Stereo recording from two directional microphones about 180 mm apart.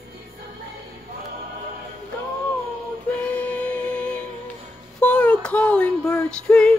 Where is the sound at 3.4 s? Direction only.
10° left (ahead or behind).